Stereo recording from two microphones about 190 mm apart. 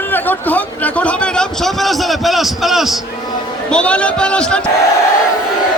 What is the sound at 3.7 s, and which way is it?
Speech, 5° left (ahead or behind).